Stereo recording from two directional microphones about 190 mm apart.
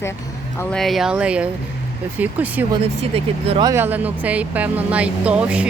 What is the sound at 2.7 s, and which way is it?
Speech, 30° right (ahead or behind).